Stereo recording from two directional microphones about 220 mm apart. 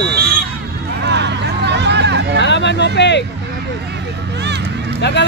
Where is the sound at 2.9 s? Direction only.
50° left (ahead or behind).